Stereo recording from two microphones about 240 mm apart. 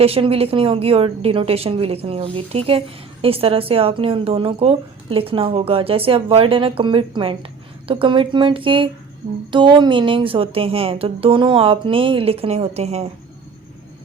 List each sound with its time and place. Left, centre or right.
0.0 s a woman's voice: right